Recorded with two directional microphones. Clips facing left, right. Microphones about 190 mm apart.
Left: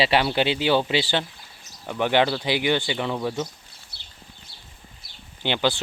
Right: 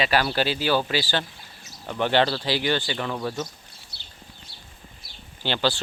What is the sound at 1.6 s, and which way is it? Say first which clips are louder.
Speech: left 1 dB; 5° left (ahead or behind).